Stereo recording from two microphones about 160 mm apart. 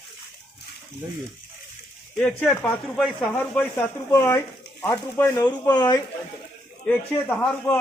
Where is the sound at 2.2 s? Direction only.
10° left (ahead or behind).